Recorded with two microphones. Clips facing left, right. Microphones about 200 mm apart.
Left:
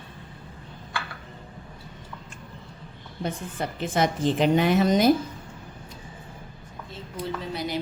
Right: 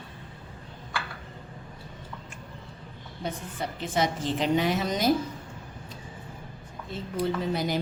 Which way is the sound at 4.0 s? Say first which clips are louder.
Left 4 dB; 55° left (ahead or behind).